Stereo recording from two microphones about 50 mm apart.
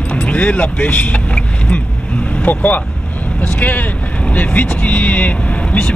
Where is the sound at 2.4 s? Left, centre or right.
Left.